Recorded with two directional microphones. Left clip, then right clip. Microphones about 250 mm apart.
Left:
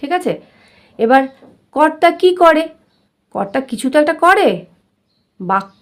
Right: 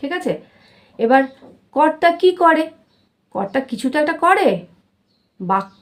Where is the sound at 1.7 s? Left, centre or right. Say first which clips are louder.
Left 3 dB; left.